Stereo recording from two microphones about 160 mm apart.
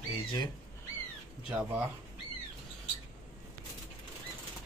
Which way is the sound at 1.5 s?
10° right (ahead or behind).